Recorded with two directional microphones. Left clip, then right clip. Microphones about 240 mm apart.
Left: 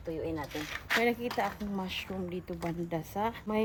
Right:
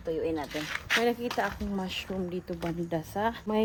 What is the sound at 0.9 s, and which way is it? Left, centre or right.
Speech, centre.